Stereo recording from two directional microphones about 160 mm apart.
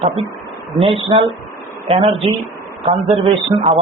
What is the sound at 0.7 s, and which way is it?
Speech, 35° right (ahead or behind).